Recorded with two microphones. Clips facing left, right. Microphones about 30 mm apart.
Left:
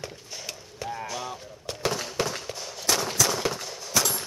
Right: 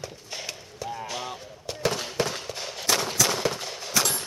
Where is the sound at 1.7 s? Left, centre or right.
Centre.